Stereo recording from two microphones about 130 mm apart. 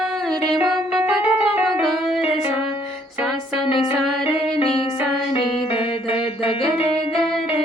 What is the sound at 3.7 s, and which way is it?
Music, 45° left (ahead or behind).